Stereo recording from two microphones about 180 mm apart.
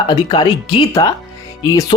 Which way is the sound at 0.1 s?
25° left (ahead or behind).